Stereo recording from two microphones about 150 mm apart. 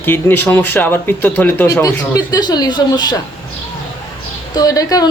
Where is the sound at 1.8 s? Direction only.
25° left (ahead or behind).